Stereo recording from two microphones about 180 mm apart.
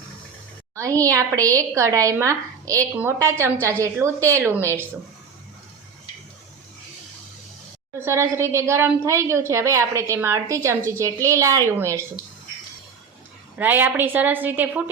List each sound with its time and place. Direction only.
0.8 s a woman's voice: 20° right (ahead or behind)
7.9 s a woman's voice: 15° right (ahead or behind)
13.6 s a woman's voice: 10° right (ahead or behind)